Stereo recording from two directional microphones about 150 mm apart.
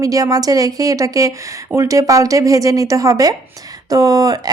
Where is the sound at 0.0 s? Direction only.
25° right (ahead or behind).